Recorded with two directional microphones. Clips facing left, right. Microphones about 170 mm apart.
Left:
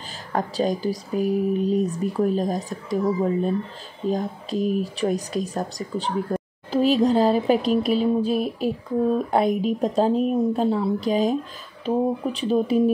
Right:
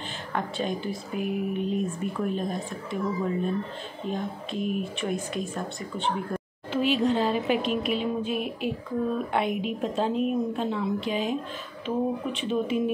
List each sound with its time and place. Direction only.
0.3 s speech: 40° left (ahead or behind)